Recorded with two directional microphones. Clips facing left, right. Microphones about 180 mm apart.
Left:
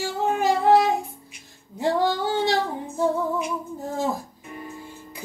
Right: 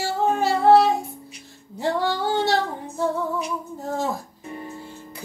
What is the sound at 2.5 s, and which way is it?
Child singing, 15° left (ahead or behind).